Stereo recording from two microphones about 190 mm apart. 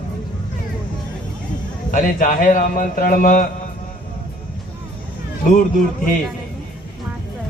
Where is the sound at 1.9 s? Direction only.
40° left (ahead or behind).